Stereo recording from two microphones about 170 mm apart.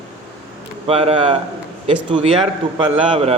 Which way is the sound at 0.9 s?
35° right (ahead or behind).